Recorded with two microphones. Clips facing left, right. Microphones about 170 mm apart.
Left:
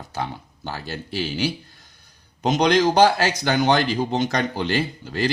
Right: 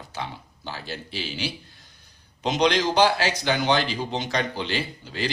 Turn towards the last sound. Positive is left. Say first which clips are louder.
# left 6 dB
turn(degrees=45)  # may be behind; listen again after turning